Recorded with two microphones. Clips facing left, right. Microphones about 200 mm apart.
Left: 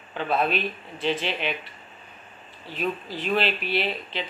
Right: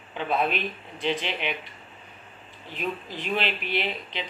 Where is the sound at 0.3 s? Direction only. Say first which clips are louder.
Left 2 dB; 15° right (ahead or behind).